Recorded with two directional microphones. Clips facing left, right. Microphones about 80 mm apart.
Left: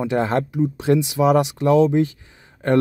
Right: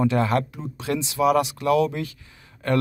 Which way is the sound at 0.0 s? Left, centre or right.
Left.